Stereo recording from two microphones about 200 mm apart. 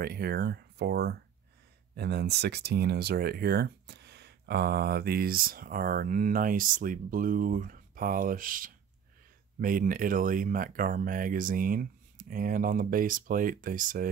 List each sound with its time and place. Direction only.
0.0 s speech: 50° right (ahead or behind)